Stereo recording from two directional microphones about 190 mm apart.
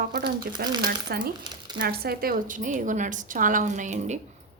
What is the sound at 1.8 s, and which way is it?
A woman's voice, 55° right (ahead or behind).